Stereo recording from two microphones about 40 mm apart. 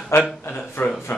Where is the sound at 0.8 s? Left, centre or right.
Left.